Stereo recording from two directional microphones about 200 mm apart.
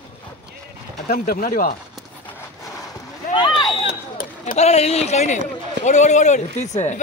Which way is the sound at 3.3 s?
20° left (ahead or behind).